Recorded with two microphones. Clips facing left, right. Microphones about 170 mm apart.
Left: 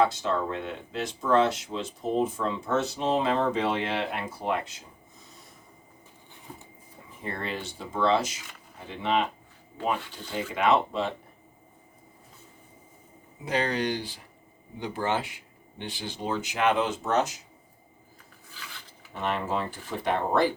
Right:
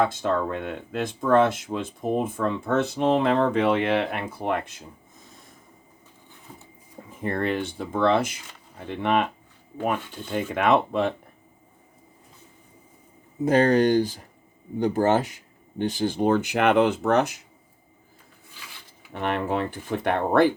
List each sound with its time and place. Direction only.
0.0 s speech: 50° right (ahead or behind)
7.2 s speech: 55° right (ahead or behind)
13.4 s speech: 45° right (ahead or behind)
19.2 s speech: 60° right (ahead or behind)